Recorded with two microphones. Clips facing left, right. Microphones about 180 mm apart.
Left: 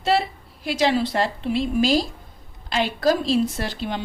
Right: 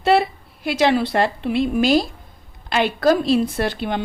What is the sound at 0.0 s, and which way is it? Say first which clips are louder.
A woman's voice: right 5 dB; 60° right (ahead or behind).